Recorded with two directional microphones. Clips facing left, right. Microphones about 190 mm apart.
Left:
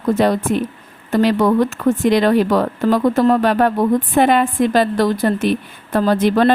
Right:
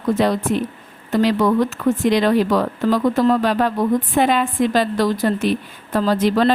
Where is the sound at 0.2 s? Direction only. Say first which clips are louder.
Left 2 dB; 50° left (ahead or behind).